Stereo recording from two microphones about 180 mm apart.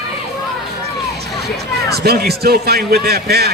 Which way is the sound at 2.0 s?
60° right (ahead or behind).